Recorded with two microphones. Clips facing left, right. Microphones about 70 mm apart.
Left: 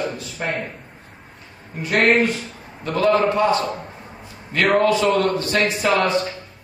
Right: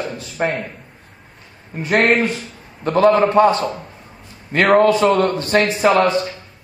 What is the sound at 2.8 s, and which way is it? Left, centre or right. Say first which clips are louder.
A man's voice: right 4 dB; right.